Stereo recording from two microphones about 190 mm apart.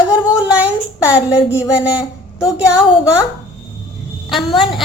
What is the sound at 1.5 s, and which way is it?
A woman's voice, 5° right (ahead or behind).